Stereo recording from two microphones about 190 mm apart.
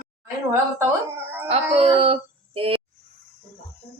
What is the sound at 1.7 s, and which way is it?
Speech, 30° right (ahead or behind).